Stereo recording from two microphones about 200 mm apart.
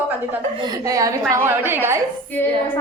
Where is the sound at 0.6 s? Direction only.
15° right (ahead or behind).